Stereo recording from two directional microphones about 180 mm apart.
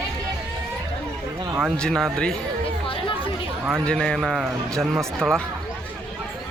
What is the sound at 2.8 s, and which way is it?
Chatter, 30° left (ahead or behind).